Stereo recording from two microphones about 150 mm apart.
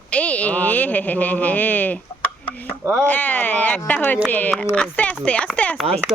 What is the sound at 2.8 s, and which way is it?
Speech, 20° right (ahead or behind).